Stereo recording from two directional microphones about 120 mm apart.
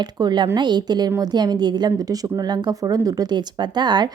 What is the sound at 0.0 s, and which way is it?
A woman's voice, 35° right (ahead or behind).